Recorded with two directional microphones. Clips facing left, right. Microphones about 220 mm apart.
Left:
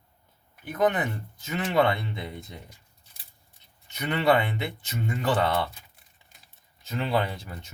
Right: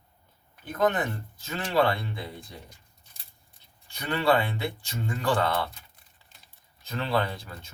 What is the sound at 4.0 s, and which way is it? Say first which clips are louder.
Speech: left 1 dB; 20° left (ahead or behind).